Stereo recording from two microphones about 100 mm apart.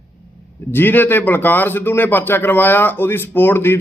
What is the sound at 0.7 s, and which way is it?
Speech, 20° left (ahead or behind).